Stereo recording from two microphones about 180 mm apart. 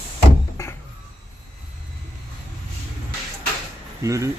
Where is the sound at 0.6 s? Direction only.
15° left (ahead or behind).